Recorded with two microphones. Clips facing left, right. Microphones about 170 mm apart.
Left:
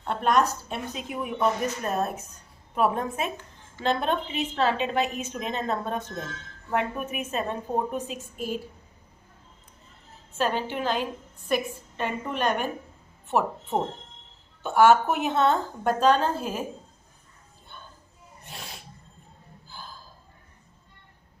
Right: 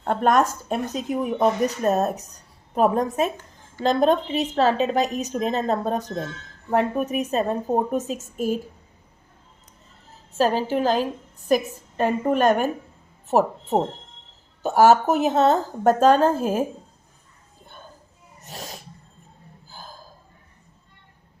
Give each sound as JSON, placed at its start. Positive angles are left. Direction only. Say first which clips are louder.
{"t": 0.0, "sound": "a woman's voice", "louder": "right 4 dB", "side_deg": -45}
{"t": 10.3, "sound": "a woman's voice", "louder": "right 6 dB", "side_deg": -35}
{"t": 18.4, "sound": "a sound", "louder": "right 5 dB", "side_deg": -40}